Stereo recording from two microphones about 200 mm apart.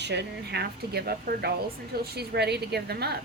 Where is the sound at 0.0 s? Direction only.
60° right (ahead or behind).